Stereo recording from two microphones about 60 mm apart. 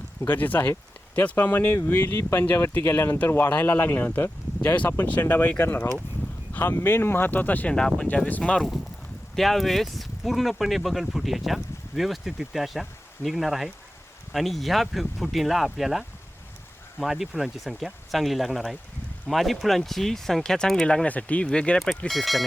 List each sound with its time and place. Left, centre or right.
0.3 s speech: left
7.7 s speech: centre
9.3 s speech: centre
20.8 s speech: centre
21.8 s speech: centre